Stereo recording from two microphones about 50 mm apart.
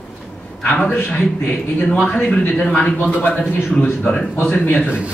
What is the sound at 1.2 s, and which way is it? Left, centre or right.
Speech, left.